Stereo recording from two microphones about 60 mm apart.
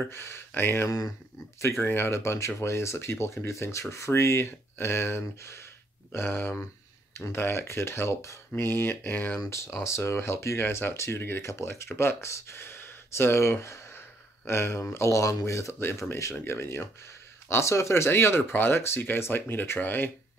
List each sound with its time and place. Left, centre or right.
0.1 s speech: left
0.8 s speech: left
1.8 s speech: left
6.1 s speech: left
8.6 s speech: left
9.5 s speech: left
11.5 s speech: left